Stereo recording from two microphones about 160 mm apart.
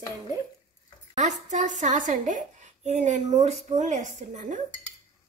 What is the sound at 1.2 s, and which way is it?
A woman's voice, 50° right (ahead or behind).